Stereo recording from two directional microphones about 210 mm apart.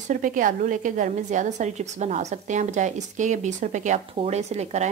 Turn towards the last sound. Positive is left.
turn(degrees=-30)  # may be behind; listen again after turning